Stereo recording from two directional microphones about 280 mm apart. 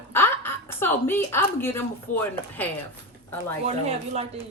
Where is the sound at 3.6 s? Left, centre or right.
Right.